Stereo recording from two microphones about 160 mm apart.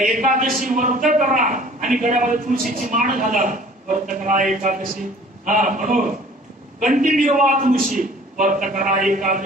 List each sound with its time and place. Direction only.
0.0 s a woman's voice: 55° right (ahead or behind)